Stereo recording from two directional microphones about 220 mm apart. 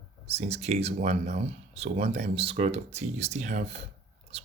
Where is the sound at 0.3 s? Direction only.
30° right (ahead or behind).